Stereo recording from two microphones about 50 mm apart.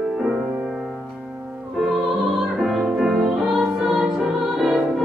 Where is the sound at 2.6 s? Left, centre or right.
Centre.